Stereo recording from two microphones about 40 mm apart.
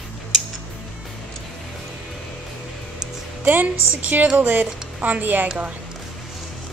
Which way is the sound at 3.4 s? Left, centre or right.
Right.